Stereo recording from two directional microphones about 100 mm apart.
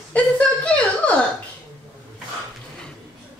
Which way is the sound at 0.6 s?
15° left (ahead or behind).